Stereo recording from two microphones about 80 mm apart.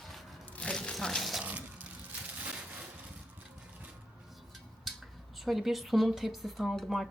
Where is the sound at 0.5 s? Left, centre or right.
Centre.